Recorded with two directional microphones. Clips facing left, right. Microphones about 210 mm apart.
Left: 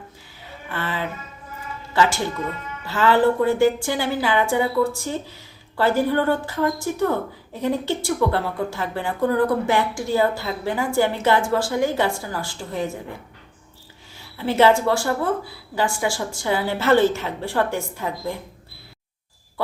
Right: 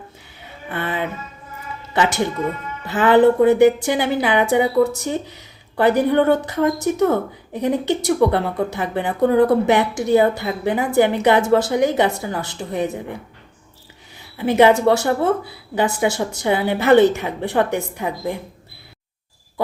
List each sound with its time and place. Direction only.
0.7 s music: 20° right (ahead or behind)
1.9 s a woman's voice: 20° right (ahead or behind)
14.2 s a woman's voice: 15° right (ahead or behind)